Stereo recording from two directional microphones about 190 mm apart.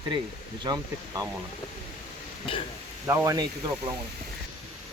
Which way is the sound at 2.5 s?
30° left (ahead or behind).